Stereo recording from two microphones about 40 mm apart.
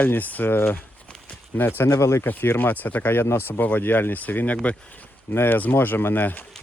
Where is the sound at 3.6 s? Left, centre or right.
Left.